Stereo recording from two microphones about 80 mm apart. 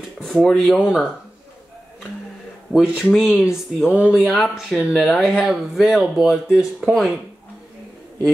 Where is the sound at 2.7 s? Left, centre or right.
Centre.